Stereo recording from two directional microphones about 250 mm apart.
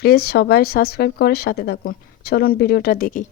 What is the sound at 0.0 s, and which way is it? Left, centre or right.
Speech, left.